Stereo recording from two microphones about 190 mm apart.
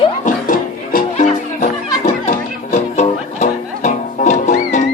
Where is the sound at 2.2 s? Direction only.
35° left (ahead or behind).